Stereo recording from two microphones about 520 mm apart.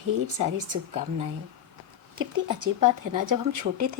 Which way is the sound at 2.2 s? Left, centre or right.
Right.